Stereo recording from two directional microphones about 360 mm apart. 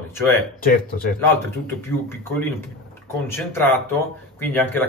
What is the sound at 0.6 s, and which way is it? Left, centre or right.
Speech, left.